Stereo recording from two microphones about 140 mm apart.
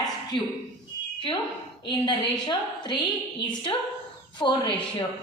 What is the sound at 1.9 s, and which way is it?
A woman's voice, 30° left (ahead or behind).